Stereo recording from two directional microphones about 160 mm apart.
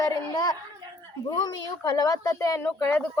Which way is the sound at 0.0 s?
25° left (ahead or behind).